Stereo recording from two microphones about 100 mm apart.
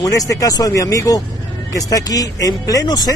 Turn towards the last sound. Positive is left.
turn(degrees=40)  # may be behind; listen again after turning